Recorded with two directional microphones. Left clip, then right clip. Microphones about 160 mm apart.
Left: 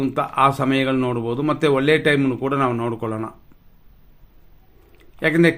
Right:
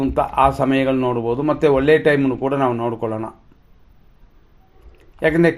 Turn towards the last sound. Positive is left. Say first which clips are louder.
# right 1 dB
turn(degrees=30)  # may be behind; listen again after turning